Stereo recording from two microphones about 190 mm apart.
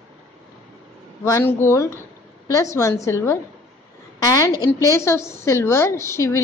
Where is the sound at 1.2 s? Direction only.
15° left (ahead or behind).